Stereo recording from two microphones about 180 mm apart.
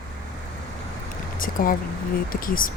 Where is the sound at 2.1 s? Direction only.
50° left (ahead or behind).